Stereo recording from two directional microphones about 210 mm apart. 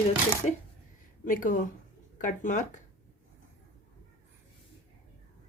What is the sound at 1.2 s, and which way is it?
Speech, 40° left (ahead or behind).